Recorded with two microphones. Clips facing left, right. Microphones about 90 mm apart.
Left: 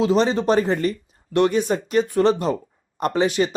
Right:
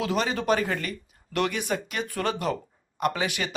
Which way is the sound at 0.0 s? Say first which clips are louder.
Left 8 dB; 25° left (ahead or behind).